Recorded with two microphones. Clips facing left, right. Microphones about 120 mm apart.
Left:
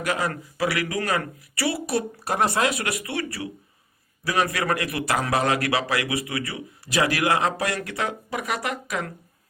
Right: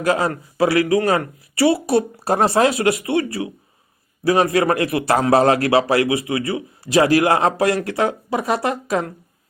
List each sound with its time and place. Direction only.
0.0 s speech: 30° right (ahead or behind)